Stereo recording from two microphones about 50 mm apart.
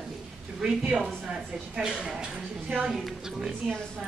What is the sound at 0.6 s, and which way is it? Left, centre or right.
A woman's voice, centre.